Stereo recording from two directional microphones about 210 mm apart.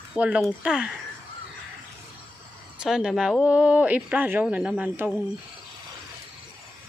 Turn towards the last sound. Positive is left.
turn(degrees=-5)  # may be behind; listen again after turning